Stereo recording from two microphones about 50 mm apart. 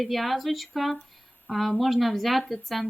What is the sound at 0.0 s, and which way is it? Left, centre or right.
A woman's voice, centre.